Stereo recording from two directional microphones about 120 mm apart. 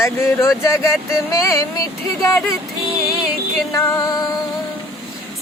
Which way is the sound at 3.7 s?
20° left (ahead or behind).